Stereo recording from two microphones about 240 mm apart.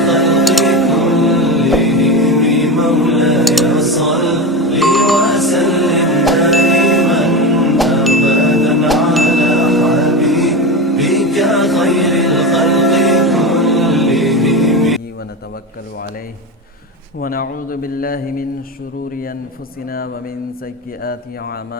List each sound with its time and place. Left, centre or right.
0.0 s music: centre
17.2 s speech: left